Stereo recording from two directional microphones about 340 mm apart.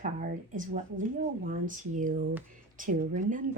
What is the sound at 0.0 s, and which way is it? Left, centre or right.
Speech, right.